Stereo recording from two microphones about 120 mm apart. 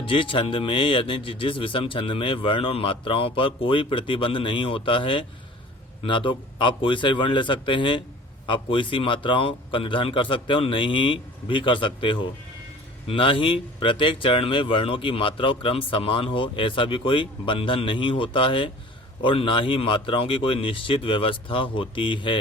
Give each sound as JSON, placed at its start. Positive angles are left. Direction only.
{"t": 0.0, "sound": "speech", "side_deg": 45}